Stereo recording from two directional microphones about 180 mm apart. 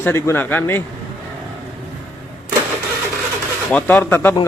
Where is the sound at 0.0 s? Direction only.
15° left (ahead or behind).